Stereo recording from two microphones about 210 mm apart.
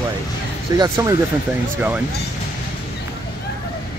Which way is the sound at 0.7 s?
15° right (ahead or behind).